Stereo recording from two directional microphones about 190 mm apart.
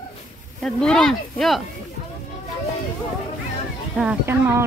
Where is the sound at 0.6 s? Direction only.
5° left (ahead or behind).